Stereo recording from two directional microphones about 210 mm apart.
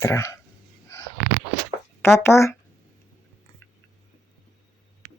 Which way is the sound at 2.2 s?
10° left (ahead or behind).